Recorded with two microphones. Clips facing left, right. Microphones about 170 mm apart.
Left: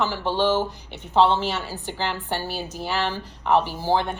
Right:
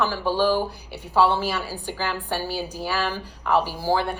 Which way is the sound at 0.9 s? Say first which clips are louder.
Left 2 dB; 10° right (ahead or behind).